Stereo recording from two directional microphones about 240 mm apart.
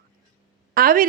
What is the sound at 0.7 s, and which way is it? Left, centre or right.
Speech, right.